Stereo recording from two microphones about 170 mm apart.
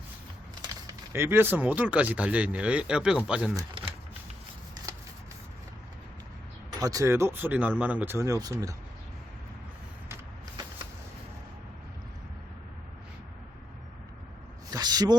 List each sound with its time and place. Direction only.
0.7 s speech: 15° right (ahead or behind)
3.5 s speech: 20° right (ahead or behind)
6.7 s speech: 20° right (ahead or behind)
14.7 s a sound: 25° right (ahead or behind)